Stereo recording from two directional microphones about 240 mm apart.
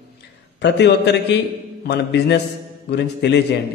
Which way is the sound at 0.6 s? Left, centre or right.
Left.